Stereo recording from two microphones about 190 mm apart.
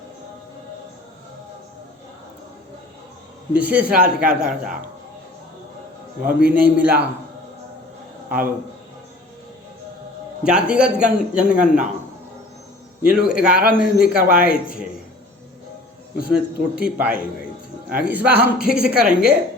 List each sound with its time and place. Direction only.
3.5 s a man's voice: 5° right (ahead or behind)
6.2 s a woman's voice: 5° right (ahead or behind)
10.4 s a man's voice: 5° right (ahead or behind)
11.5 s a man's voice: 45° right (ahead or behind)
13.1 s a man's voice: 5° right (ahead or behind)
16.1 s a woman's voice: 5° right (ahead or behind)